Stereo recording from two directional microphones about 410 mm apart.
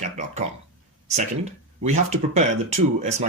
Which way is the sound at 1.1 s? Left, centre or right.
Centre.